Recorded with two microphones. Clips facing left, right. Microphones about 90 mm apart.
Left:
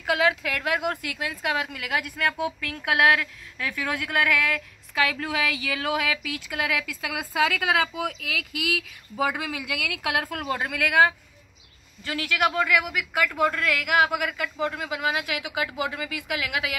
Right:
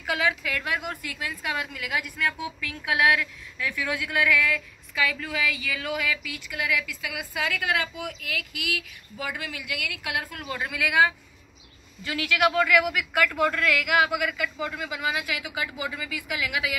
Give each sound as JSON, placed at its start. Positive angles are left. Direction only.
{"t": 0.4, "sound": "a woman's voice", "side_deg": 75}
{"t": 1.6, "sound": "speech", "side_deg": 55}
{"t": 10.6, "sound": "a man's voice", "side_deg": 55}
{"t": 12.0, "sound": "speech", "side_deg": 35}
{"t": 12.4, "sound": "a man's voice", "side_deg": 20}